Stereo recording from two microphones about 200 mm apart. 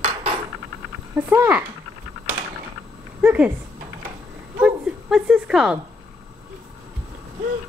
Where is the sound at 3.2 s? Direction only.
10° right (ahead or behind).